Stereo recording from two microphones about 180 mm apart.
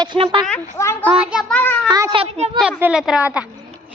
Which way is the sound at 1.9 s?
25° right (ahead or behind).